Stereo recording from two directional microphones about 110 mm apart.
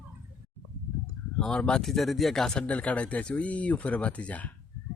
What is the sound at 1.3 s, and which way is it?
Speech, 5° left (ahead or behind).